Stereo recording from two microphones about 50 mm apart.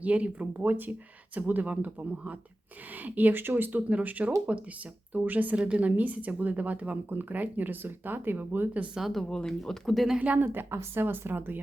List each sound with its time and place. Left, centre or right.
0.0 s speech: right
3.8 s speech: right
5.2 s speech: right
9.0 s speech: centre
9.3 s speech: centre
10.2 s speech: right
10.5 s speech: right